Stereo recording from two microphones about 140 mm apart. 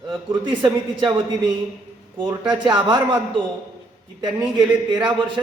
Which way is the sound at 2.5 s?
35° right (ahead or behind).